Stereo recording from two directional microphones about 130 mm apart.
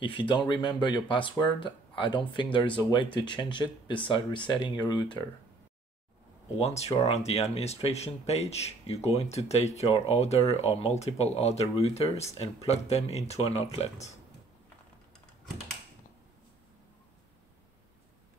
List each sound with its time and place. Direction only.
0.0 s speech: 40° left (ahead or behind)
6.6 s speech: 55° left (ahead or behind)